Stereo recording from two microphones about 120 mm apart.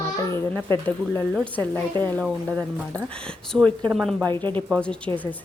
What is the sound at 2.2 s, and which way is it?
A woman's voice, centre (ahead or behind).